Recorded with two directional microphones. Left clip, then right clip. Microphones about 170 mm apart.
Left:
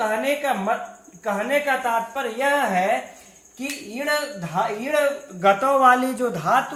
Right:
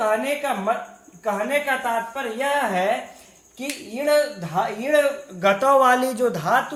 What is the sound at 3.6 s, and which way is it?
Speech, 35° right (ahead or behind).